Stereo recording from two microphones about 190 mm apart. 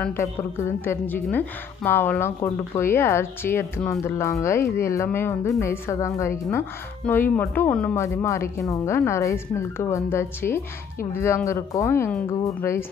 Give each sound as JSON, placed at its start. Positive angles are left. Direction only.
{"t": 0.0, "sound": "a woman's voice", "side_deg": 10}